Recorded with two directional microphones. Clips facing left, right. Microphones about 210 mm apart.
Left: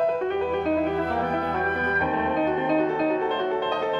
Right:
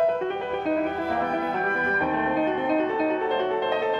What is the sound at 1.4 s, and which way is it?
Music, 5° right (ahead or behind).